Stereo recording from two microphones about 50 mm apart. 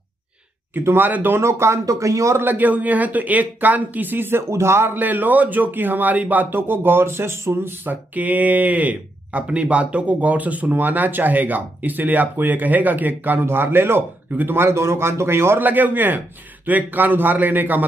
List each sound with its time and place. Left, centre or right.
0.7 s speech: right
1.4 s speech: right
2.4 s speech: right
4.5 s a man's voice: right
4.9 s speech: right
7.8 s speech: right
14.5 s a man's voice: right
15.6 s speech: right